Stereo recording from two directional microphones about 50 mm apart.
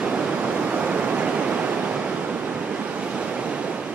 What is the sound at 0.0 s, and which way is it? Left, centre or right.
Pink noise, right.